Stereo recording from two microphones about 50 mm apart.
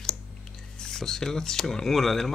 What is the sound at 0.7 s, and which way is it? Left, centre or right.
Drip, centre.